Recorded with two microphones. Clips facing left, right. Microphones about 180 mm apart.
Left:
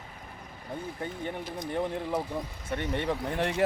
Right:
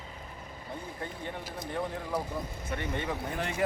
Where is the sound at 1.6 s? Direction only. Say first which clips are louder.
Left 4 dB; 20° left (ahead or behind).